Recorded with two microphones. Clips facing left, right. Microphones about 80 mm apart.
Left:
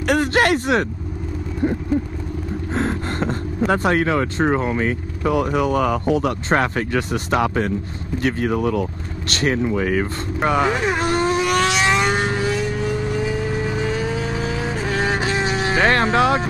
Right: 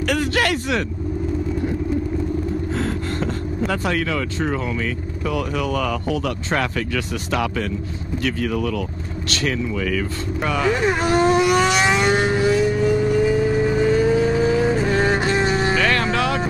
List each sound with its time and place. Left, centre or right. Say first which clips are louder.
0.1 s speech: left 5 dB; left
2.7 s speech: left 1 dB; left
10.7 s speech: right 1 dB; centre
11.1 s vehicle: right 5 dB; centre
15.7 s music: left 3 dB; left